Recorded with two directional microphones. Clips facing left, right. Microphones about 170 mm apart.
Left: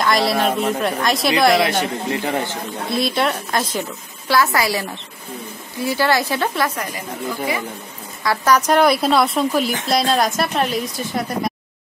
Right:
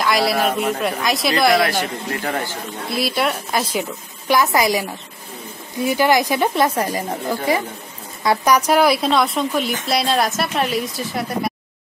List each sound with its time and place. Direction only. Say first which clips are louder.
0.0 s speech: even; centre (ahead or behind)
1.6 s a man's voice: left 1 dB; 20° left (ahead or behind)
2.9 s a woman's voice: left 1 dB; 5° right (ahead or behind)
5.9 s a woman's voice: right 2 dB; 15° right (ahead or behind)
6.8 s speech: right 5 dB; 35° right (ahead or behind)
8.2 s speech: right 1 dB; 15° right (ahead or behind)